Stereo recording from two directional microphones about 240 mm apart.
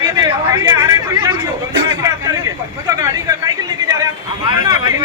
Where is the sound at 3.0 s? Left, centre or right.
Centre.